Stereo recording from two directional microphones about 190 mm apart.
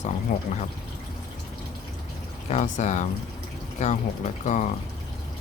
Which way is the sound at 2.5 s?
40° left (ahead or behind).